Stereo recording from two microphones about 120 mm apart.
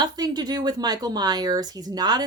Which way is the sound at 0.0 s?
35° right (ahead or behind).